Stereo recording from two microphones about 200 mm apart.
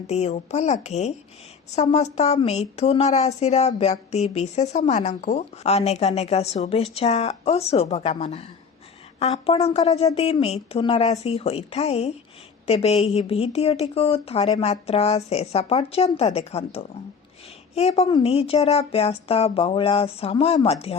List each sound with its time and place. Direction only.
0.1 s speech: 35° left (ahead or behind)